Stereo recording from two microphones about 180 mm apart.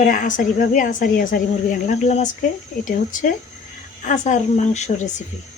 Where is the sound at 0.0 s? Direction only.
45° left (ahead or behind).